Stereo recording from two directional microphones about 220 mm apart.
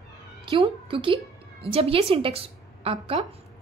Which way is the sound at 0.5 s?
25° right (ahead or behind).